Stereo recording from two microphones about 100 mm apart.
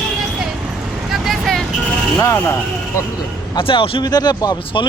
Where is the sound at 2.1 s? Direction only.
25° left (ahead or behind).